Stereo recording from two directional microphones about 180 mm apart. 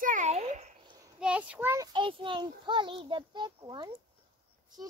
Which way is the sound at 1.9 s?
25° right (ahead or behind).